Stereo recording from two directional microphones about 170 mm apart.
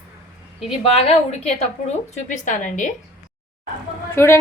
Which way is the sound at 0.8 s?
35° left (ahead or behind).